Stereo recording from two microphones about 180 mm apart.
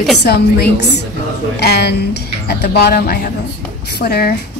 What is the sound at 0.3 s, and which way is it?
Speech, 65° left (ahead or behind).